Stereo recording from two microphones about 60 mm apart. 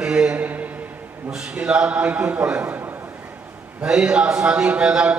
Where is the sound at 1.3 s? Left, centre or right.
Centre.